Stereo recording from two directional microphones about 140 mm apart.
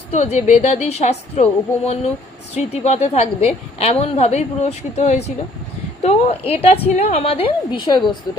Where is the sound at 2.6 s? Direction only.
50° left (ahead or behind).